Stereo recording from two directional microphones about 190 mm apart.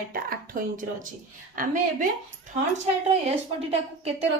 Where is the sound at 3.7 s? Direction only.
30° right (ahead or behind).